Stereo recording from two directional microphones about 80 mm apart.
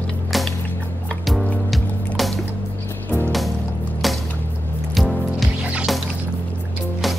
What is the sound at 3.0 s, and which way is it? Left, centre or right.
Music, left.